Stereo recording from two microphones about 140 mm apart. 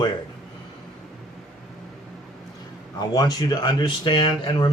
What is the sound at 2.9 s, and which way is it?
A man's voice, 30° left (ahead or behind).